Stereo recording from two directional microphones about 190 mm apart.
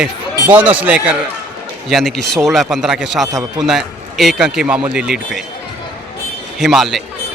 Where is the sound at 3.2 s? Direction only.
20° right (ahead or behind).